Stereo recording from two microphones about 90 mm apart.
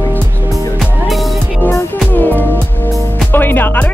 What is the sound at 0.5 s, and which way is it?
Music, centre (ahead or behind).